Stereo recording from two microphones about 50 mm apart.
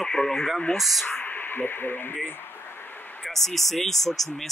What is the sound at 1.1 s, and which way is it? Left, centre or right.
Speech, left.